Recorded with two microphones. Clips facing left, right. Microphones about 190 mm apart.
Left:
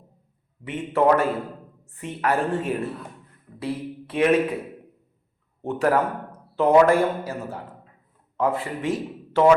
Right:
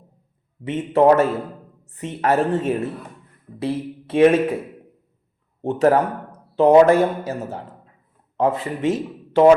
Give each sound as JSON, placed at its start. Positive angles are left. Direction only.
{"t": 0.6, "sound": "a woman's voice", "side_deg": -20}
{"t": 5.6, "sound": "a woman's voice", "side_deg": -20}
{"t": 8.4, "sound": "a man's voice", "side_deg": -20}